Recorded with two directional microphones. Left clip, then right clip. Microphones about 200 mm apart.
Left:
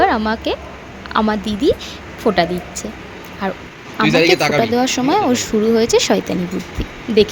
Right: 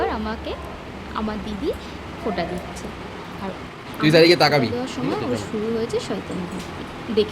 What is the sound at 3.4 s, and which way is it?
Speech, 35° left (ahead or behind).